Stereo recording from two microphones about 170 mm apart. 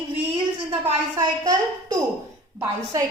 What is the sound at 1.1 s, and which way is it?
A woman's voice, 20° right (ahead or behind).